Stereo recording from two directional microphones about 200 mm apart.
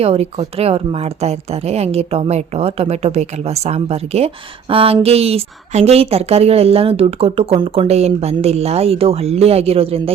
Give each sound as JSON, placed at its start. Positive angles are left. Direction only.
{"t": 0.0, "sound": "a woman's voice", "side_deg": -30}